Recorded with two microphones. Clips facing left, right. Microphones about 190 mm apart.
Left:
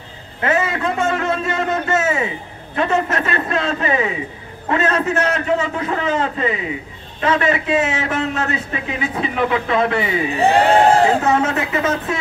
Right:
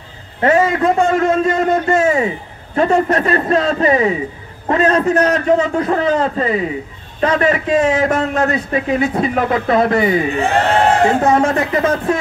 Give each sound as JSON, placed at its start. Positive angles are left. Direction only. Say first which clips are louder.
{"t": 0.4, "sound": "a man's voice", "louder": "right 6 dB", "side_deg": -40}
{"t": 11.2, "sound": "a man's voice", "louder": "right 4 dB", "side_deg": -45}